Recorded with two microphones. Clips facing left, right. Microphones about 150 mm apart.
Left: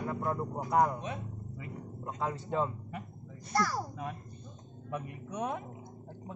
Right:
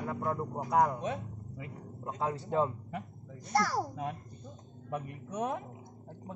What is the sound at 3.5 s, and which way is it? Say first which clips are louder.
Speech: right 2 dB; 80° right.